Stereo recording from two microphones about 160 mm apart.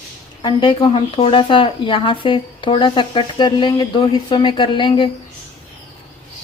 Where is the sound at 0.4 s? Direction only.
30° left (ahead or behind).